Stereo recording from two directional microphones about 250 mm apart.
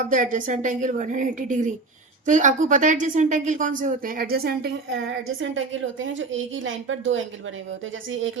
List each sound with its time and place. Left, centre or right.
0.0 s a woman's voice: right